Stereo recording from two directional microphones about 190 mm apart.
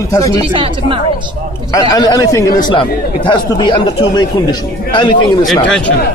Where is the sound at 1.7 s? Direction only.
20° left (ahead or behind).